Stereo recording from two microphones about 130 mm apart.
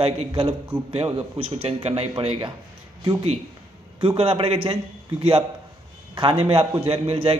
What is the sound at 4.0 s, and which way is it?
A man's voice, 45° right (ahead or behind).